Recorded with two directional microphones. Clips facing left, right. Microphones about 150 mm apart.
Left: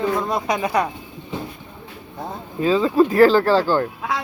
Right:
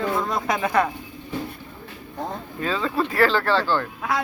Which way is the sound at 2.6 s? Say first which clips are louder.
Left 9 dB; 5° left (ahead or behind).